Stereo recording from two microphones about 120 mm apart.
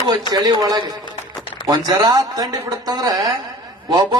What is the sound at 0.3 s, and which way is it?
A man's voice, 35° right (ahead or behind).